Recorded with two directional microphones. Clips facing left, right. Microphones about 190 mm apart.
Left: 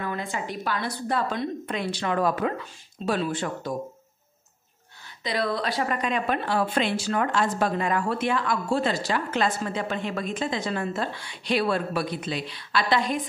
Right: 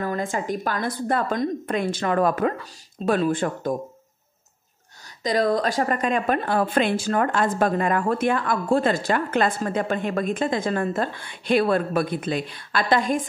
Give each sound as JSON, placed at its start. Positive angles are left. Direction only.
{"t": 0.0, "sound": "a woman's voice", "side_deg": -45}
{"t": 5.0, "sound": "a woman's voice", "side_deg": -45}